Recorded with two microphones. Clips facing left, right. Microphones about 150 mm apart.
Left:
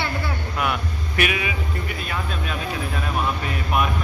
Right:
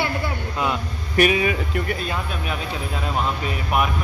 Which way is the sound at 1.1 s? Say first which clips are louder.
Right 6 dB; 40° right (ahead or behind).